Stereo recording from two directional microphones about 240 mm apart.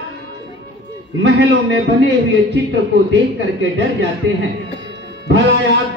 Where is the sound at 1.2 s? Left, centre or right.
Right.